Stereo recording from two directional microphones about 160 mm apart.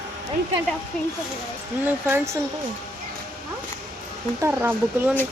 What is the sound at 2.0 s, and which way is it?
Speech, 15° right (ahead or behind).